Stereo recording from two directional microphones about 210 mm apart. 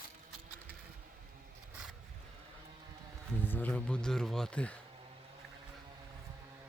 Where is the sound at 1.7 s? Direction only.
5° right (ahead or behind).